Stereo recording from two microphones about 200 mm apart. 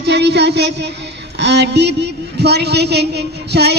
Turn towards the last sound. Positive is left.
turn(degrees=-55)  # may be behind; listen again after turning